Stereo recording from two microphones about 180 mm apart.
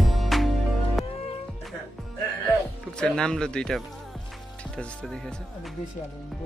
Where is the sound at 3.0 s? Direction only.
5° left (ahead or behind).